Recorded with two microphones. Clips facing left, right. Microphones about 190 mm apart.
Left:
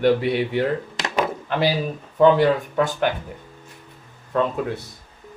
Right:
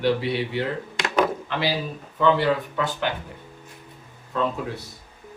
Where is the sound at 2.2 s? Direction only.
45° left (ahead or behind).